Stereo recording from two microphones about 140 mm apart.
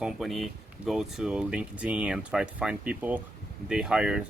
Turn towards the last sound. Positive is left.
turn(degrees=-5)  # may be behind; listen again after turning